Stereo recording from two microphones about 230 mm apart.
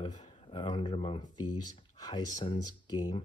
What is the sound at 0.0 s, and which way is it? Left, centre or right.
Speech, centre.